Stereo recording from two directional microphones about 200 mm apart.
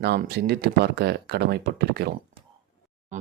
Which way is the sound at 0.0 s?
55° right (ahead or behind).